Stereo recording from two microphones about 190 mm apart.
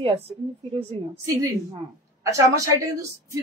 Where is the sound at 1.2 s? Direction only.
15° right (ahead or behind).